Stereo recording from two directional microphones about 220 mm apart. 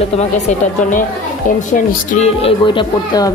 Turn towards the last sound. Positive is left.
turn(degrees=20)  # may be behind; listen again after turning